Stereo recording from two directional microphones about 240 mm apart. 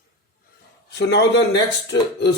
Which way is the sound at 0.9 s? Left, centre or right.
Left.